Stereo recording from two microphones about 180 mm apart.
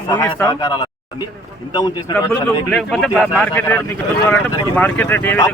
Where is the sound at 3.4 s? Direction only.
15° left (ahead or behind).